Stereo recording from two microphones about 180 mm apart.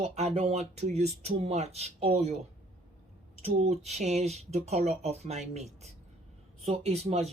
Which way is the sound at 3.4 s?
35° right (ahead or behind).